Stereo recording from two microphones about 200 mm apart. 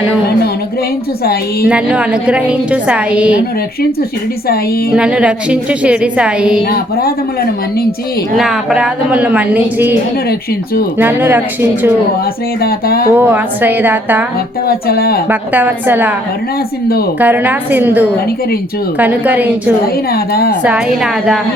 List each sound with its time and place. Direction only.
1.6 s a woman's voice: 5° right (ahead or behind)
4.9 s a woman's voice: 5° right (ahead or behind)
8.4 s a woman's voice: 5° right (ahead or behind)
10.9 s a woman's voice: 10° right (ahead or behind)
12.6 s speech: 50° left (ahead or behind)
13.1 s a woman's voice: 10° right (ahead or behind)
14.7 s speech: 50° left (ahead or behind)
15.3 s a woman's voice: 10° right (ahead or behind)
17.2 s a woman's voice: 10° right (ahead or behind)
20.1 s speech: 50° left (ahead or behind)
20.7 s a woman's voice: 5° right (ahead or behind)